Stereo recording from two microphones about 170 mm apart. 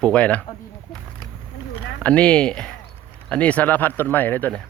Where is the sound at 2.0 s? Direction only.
5° left (ahead or behind).